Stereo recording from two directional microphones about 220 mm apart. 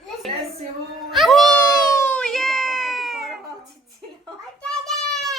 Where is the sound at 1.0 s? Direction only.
Centre (ahead or behind).